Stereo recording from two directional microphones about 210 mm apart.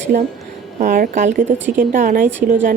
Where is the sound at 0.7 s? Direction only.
40° right (ahead or behind).